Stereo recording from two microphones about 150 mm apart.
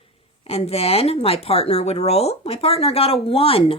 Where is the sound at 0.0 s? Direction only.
40° left (ahead or behind).